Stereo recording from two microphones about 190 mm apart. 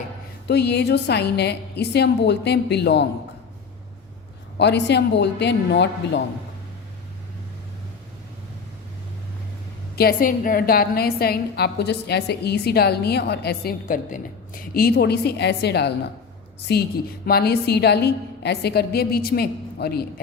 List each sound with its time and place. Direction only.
0.4 s a woman's voice: 60° left (ahead or behind)
4.5 s a woman's voice: 65° left (ahead or behind)
9.9 s a woman's voice: 50° left (ahead or behind)